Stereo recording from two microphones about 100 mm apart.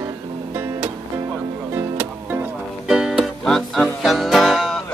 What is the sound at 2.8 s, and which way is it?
Music, 5° right (ahead or behind).